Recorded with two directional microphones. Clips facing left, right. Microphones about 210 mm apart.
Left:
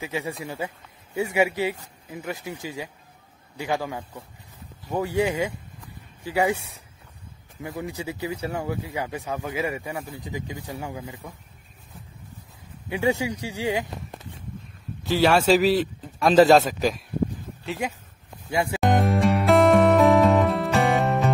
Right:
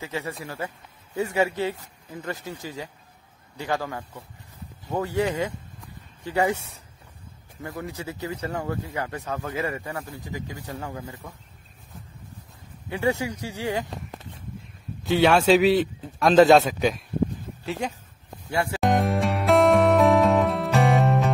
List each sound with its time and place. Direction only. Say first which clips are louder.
0.0 s speech: left 2 dB; 15° left (ahead or behind)
5.8 s a sound: left 1 dB; 10° left (ahead or behind)
7.6 s speech: left 2 dB; 15° left (ahead or behind)
12.9 s speech: left 1 dB; 15° left (ahead or behind)
15.0 s a man's voice: right 1 dB; centre (ahead or behind); by 18.8 s 15° left (ahead or behind)
18.8 s music: left 1 dB; centre (ahead or behind)